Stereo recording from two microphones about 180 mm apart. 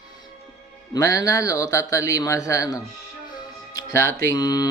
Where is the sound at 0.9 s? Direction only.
20° left (ahead or behind).